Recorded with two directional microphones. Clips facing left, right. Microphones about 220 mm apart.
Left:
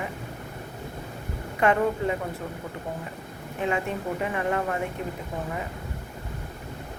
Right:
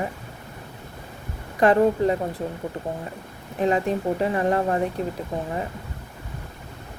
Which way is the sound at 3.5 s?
35° right (ahead or behind).